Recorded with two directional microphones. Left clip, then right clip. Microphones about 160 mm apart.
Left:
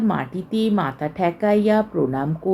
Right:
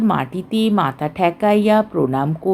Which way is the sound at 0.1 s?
45° right (ahead or behind).